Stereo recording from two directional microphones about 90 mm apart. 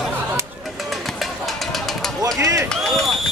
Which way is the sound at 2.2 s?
40° right (ahead or behind).